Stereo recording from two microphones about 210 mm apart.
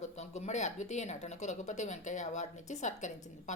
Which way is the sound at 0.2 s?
35° left (ahead or behind).